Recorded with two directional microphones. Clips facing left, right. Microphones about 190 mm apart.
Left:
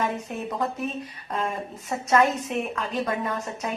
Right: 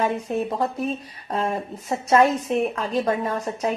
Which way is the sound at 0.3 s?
35° right (ahead or behind).